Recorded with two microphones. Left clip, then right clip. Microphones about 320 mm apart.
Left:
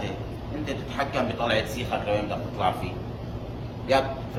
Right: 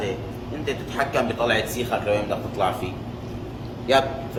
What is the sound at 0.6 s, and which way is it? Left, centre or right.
A man's voice, centre.